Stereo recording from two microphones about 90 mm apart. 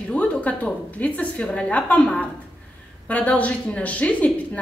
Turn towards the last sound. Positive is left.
turn(degrees=15)  # may be behind; listen again after turning